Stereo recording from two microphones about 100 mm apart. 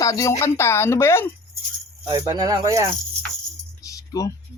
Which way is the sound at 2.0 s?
40° right (ahead or behind).